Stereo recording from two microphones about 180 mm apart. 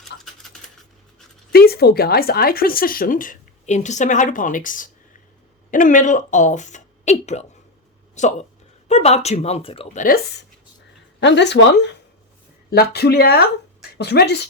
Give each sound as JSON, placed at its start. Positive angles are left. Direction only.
{"t": 0.0, "sound": "a sound", "side_deg": 0}
{"t": 1.5, "sound": "speech", "side_deg": 60}
{"t": 11.2, "sound": "speech", "side_deg": 75}